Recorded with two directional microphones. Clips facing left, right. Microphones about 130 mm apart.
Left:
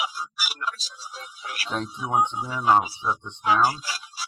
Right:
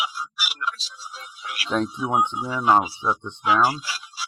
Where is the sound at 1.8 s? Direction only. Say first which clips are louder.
Right 6 dB; 45° right (ahead or behind).